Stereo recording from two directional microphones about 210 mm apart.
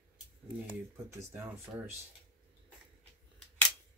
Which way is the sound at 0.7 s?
15° right (ahead or behind).